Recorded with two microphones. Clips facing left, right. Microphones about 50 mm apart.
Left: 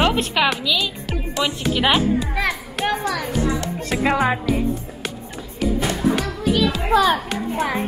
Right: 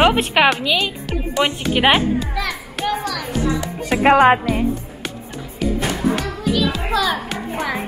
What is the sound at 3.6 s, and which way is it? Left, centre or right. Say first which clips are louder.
Music: right 3 dB; centre.